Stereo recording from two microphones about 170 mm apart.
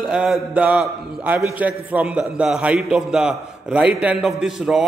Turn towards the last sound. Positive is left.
turn(degrees=-5)  # may be behind; listen again after turning